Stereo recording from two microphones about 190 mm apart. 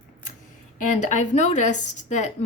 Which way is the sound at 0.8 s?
40° left (ahead or behind).